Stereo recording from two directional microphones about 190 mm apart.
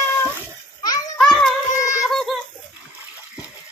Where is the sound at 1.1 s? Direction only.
5° left (ahead or behind).